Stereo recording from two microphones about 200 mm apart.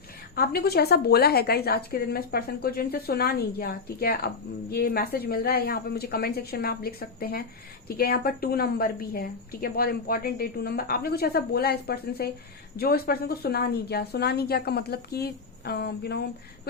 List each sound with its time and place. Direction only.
0.3 s a woman's voice: 50° left (ahead or behind)